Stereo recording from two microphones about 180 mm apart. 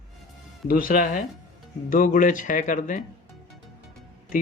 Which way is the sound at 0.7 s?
55° left (ahead or behind).